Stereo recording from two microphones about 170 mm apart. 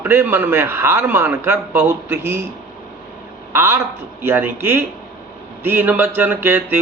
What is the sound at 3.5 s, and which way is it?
A man's voice, 15° right (ahead or behind).